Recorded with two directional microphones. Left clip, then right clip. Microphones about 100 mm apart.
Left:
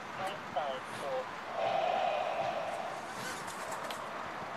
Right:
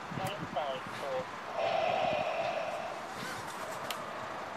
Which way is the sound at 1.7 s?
35° right (ahead or behind).